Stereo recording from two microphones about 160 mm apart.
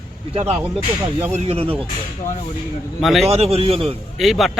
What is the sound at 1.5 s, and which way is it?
Speech, 35° right (ahead or behind).